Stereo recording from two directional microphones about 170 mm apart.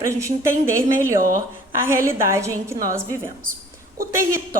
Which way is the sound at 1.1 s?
55° right (ahead or behind).